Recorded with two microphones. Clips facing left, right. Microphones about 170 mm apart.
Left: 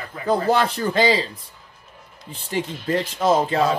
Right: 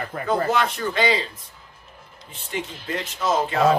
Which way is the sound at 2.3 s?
35° left (ahead or behind).